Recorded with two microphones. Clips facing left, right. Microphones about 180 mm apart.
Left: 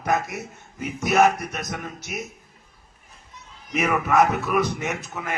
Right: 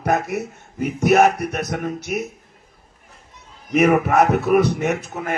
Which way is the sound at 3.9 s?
40° right (ahead or behind).